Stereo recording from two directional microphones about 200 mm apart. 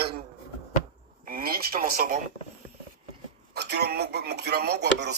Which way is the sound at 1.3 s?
45° right (ahead or behind).